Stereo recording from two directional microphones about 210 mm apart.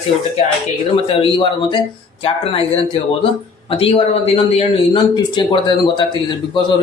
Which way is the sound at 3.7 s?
25° left (ahead or behind).